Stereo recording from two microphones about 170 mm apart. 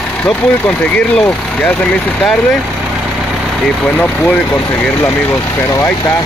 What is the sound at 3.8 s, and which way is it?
Speech, 5° left (ahead or behind).